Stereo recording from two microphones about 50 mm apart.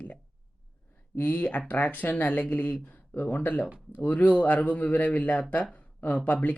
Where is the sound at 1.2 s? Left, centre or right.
Left.